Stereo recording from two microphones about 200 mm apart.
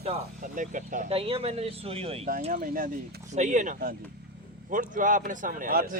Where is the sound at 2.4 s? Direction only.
45° right (ahead or behind).